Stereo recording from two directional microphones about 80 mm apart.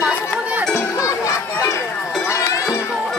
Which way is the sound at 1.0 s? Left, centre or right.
Left.